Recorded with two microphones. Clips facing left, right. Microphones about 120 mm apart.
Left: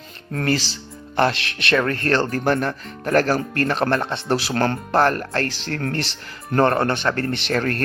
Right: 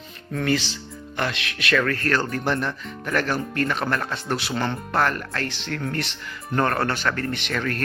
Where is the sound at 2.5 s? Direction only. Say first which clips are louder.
Left 4 dB; 40° left (ahead or behind).